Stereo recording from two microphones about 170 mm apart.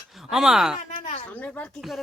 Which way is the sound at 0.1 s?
Centre (ahead or behind).